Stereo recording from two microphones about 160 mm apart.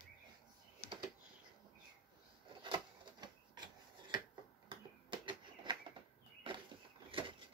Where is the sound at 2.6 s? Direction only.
30° right (ahead or behind).